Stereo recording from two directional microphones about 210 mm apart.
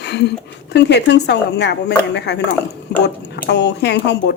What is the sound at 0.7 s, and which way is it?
Speech, 55° left (ahead or behind).